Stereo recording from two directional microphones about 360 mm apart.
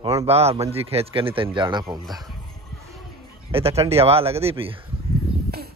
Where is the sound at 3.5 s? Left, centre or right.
Centre.